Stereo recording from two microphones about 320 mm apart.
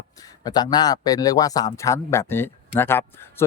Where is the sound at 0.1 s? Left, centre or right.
Centre.